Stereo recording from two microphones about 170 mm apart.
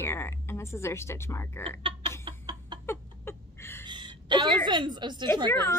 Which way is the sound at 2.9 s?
15° left (ahead or behind).